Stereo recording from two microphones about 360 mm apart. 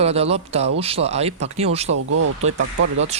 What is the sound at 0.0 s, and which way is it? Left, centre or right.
Speech, centre.